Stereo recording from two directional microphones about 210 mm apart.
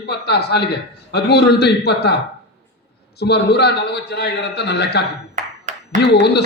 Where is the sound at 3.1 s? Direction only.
50° left (ahead or behind).